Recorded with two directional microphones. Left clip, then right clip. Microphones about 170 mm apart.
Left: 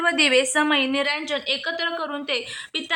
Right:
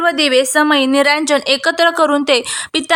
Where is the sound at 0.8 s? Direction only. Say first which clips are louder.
Right 10 dB; 60° right (ahead or behind).